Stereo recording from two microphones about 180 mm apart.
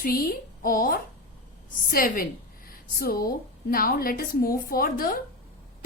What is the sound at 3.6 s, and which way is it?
A woman's voice, 55° left (ahead or behind).